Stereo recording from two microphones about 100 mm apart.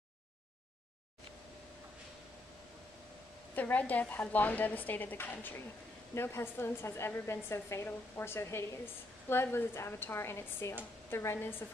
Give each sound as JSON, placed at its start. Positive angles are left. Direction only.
{"t": 3.5, "sound": "a woman's voice", "side_deg": 15}